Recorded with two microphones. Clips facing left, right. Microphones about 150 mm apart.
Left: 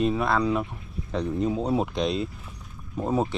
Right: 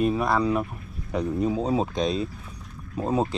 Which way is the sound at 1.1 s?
5° right (ahead or behind).